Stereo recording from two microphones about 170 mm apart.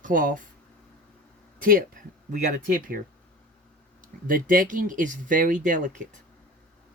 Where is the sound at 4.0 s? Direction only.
55° right (ahead or behind).